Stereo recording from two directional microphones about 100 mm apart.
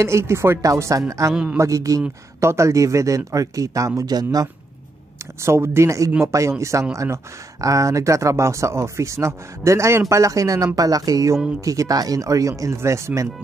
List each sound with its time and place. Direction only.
0.0 s speech: 25° right (ahead or behind)
1.3 s speech: 10° right (ahead or behind)
1.6 s speech: 35° right (ahead or behind)
5.2 s speech: 25° right (ahead or behind)